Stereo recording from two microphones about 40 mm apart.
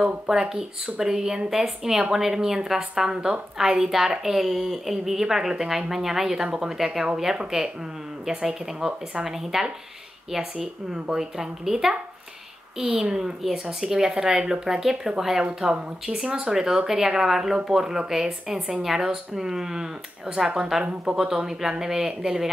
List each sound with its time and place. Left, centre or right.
0.0 s speech: centre
15.4 s speech: right
16.5 s speech: centre